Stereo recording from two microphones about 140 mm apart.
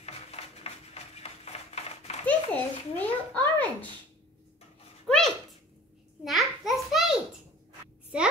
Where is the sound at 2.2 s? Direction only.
10° left (ahead or behind).